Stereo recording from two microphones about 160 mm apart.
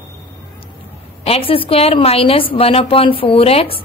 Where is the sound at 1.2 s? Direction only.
35° left (ahead or behind).